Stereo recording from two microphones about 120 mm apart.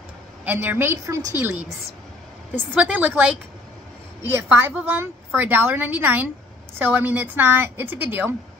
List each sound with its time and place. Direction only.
0.5 s a woman's voice: 15° right (ahead or behind)
2.5 s a woman's voice: 15° right (ahead or behind)